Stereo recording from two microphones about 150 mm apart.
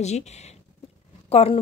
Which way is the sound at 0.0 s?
45° left (ahead or behind).